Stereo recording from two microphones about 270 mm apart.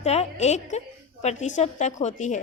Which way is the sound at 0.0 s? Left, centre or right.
Left.